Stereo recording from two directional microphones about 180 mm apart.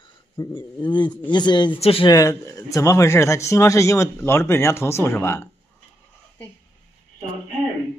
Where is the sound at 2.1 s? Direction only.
15° left (ahead or behind).